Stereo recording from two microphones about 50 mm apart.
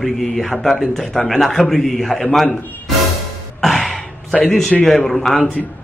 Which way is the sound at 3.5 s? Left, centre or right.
Centre.